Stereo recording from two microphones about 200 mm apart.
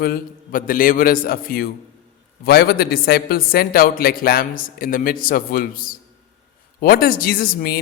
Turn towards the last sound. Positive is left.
turn(degrees=50)  # may be behind; listen again after turning